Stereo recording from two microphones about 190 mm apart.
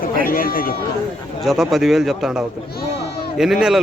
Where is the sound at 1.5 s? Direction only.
Centre (ahead or behind).